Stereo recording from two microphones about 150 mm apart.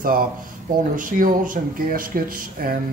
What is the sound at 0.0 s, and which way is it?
Speech, 75° right (ahead or behind).